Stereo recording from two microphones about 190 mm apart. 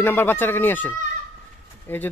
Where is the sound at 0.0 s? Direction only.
10° left (ahead or behind).